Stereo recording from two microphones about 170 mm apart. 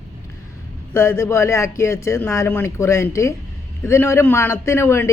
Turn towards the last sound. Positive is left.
turn(degrees=15)  # may be behind; listen again after turning